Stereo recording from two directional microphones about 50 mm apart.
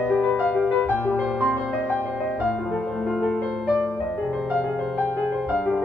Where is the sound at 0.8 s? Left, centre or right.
Left.